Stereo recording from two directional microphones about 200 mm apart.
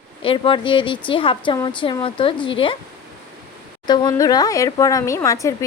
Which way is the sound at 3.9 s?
20° left (ahead or behind).